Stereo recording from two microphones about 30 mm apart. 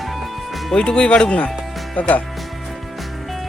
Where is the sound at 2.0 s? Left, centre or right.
Left.